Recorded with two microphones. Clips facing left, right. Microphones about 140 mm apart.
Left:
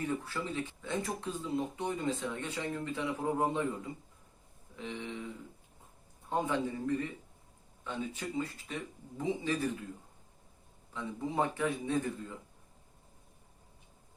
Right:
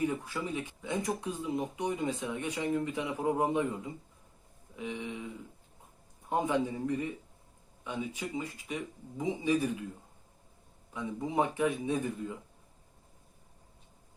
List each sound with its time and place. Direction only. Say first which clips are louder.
0.0 s speech: right 3 dB; 15° right (ahead or behind)
4.8 s speech: right 2 dB; 10° right (ahead or behind)
6.2 s speech: right 3 dB; 15° right (ahead or behind)
10.9 s speech: right 3 dB; 15° right (ahead or behind)